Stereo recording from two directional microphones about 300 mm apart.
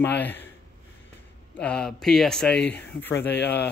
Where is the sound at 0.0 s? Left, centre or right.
Centre.